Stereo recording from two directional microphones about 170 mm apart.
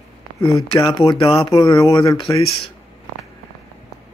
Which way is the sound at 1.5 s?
20° left (ahead or behind).